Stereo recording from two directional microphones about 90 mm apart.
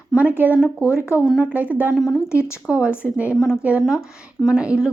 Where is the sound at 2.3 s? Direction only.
30° left (ahead or behind).